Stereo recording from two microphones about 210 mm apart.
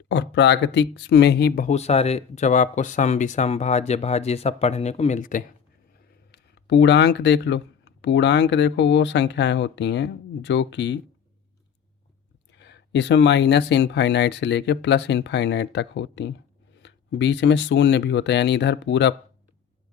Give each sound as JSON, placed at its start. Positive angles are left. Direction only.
{"t": 0.1, "sound": "speech", "side_deg": 55}
{"t": 6.3, "sound": "speech", "side_deg": 55}
{"t": 12.5, "sound": "speech", "side_deg": 55}